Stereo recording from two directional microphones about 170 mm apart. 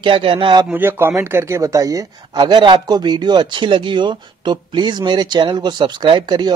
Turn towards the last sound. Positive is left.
turn(degrees=-25)  # may be behind; listen again after turning